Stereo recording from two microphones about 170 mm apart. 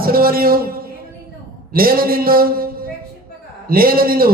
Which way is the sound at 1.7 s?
60° right (ahead or behind).